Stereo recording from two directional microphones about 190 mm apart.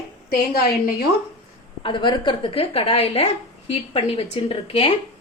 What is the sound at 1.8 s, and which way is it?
A woman's voice, 25° left (ahead or behind).